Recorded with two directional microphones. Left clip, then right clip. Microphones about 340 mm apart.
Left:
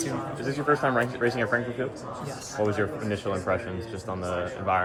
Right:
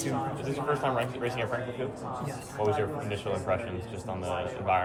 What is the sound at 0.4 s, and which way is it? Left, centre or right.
A man's voice, left.